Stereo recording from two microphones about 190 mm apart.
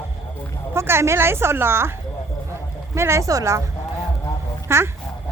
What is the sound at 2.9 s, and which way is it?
Speech, 15° right (ahead or behind).